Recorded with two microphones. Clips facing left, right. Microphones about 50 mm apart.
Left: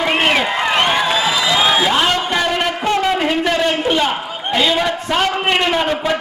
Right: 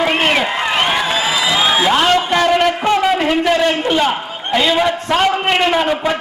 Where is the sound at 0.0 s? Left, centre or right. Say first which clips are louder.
Right 1 dB; centre.